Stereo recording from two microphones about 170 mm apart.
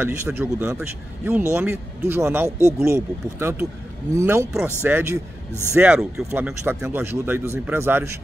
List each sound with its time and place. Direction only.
0.0 s speech: 15° right (ahead or behind)
6.6 s speech: 15° right (ahead or behind)